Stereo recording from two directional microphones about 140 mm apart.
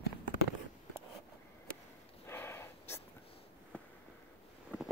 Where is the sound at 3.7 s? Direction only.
10° left (ahead or behind).